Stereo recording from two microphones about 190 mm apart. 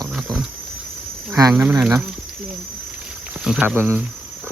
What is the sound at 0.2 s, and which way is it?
Pig, 5° right (ahead or behind).